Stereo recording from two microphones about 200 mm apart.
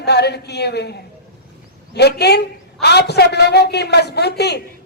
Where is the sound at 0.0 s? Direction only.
55° left (ahead or behind).